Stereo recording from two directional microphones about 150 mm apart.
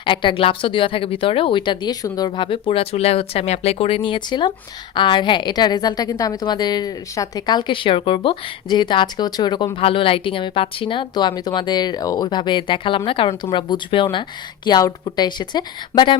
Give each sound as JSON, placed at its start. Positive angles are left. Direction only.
{"t": 0.0, "sound": "a woman's voice", "side_deg": 35}